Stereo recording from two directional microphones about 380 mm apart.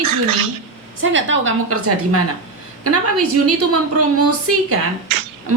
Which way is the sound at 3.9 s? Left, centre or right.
Right.